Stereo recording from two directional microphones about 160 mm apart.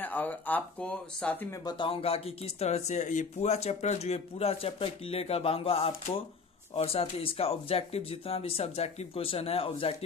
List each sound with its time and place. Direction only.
0.0 s speech: 10° left (ahead or behind)
1.6 s speech: 30° left (ahead or behind)